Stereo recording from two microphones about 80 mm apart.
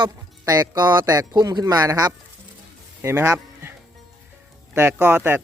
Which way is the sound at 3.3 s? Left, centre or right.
Right.